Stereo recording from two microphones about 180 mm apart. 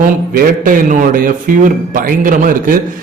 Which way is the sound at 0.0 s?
50° right (ahead or behind).